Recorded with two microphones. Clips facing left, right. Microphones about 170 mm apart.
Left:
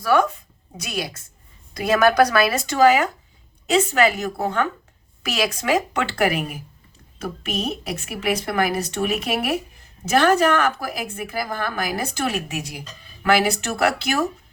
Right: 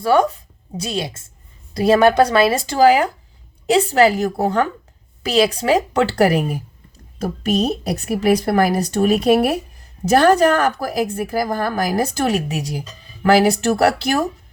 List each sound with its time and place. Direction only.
0.0 s a woman's voice: 30° right (ahead or behind)